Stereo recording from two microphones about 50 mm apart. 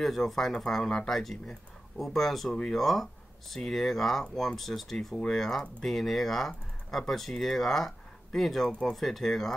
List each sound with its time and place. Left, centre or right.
0.0 s speech: centre
4.2 s speech: centre
4.6 s speech: centre